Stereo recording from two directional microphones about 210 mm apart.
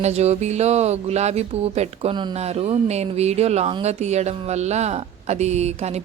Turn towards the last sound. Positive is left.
turn(degrees=-30)  # may be behind; listen again after turning